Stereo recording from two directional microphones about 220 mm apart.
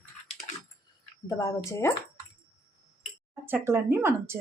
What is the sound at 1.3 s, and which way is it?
Speech, 15° left (ahead or behind).